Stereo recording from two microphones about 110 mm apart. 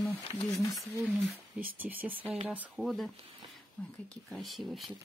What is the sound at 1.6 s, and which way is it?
Speech, 15° right (ahead or behind).